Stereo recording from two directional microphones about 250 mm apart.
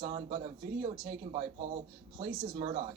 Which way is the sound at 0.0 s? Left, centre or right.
Right.